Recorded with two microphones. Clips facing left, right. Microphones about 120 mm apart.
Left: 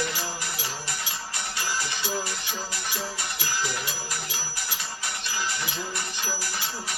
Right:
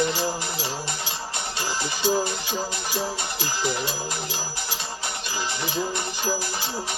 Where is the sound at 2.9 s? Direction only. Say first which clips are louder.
Right 5 dB; 25° right (ahead or behind).